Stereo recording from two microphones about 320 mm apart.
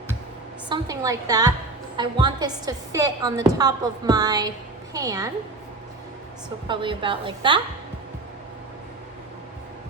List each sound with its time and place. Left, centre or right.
0.7 s a woman's voice: centre
6.7 s a woman's voice: centre